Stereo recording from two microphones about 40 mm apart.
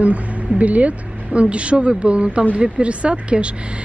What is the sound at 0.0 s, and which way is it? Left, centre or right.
Speech, right.